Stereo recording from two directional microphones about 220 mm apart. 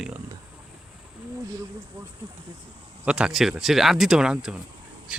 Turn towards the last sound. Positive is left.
turn(degrees=-5)  # may be behind; listen again after turning